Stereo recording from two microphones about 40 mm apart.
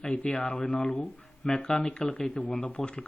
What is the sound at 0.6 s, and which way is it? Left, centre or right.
Speech, centre.